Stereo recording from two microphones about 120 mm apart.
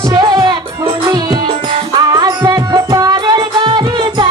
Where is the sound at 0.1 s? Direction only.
35° right (ahead or behind).